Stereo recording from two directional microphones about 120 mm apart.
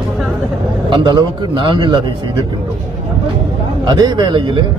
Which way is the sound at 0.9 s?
40° right (ahead or behind).